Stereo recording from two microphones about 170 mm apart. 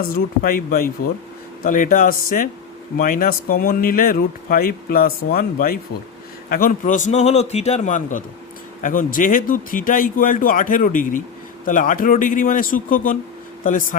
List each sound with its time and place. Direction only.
0.0 s a man's voice: 60° left (ahead or behind)